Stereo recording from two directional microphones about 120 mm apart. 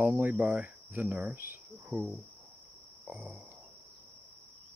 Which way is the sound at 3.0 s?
Centre (ahead or behind).